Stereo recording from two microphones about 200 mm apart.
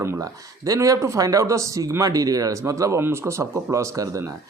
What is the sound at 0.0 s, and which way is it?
Speech, 15° right (ahead or behind).